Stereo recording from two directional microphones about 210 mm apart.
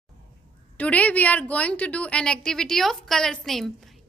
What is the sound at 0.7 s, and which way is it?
A woman's voice, 5° left (ahead or behind).